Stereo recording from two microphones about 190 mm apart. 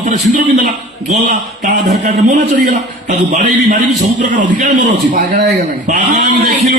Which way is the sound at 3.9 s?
40° right (ahead or behind).